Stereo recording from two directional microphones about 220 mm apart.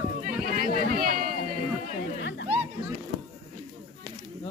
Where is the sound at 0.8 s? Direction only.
40° right (ahead or behind).